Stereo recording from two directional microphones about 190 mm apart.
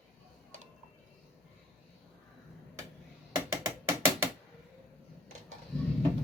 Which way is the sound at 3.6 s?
15° right (ahead or behind).